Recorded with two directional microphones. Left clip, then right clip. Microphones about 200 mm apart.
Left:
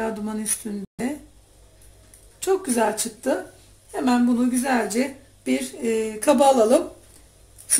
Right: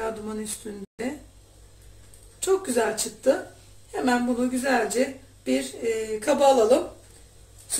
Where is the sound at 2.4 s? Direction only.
35° left (ahead or behind).